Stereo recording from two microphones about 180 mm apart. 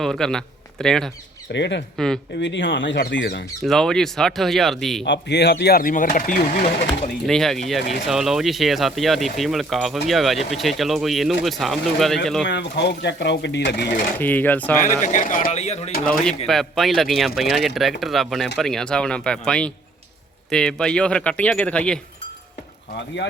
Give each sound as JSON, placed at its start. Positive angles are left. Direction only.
{"t": 0.0, "sound": "a man's voice", "side_deg": 0}
{"t": 1.5, "sound": "speech", "side_deg": 75}
{"t": 2.4, "sound": "speech", "side_deg": 90}
{"t": 3.6, "sound": "speech", "side_deg": 0}
{"t": 5.0, "sound": "speech", "side_deg": 70}
{"t": 7.3, "sound": "speech", "side_deg": 0}
{"t": 12.5, "sound": "speech", "side_deg": 75}
{"t": 14.2, "sound": "speech", "side_deg": 10}
{"t": 14.8, "sound": "speech", "side_deg": 45}
{"t": 16.5, "sound": "speech", "side_deg": 0}